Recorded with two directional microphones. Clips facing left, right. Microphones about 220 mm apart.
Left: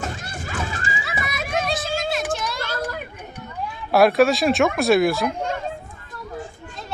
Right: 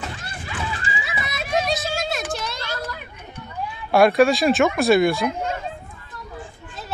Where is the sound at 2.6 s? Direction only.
50° left (ahead or behind).